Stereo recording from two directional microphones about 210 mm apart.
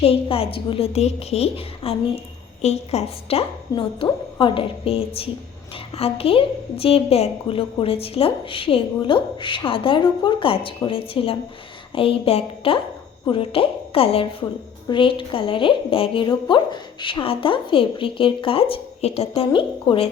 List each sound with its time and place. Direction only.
0.0 s a woman's voice: 25° left (ahead or behind)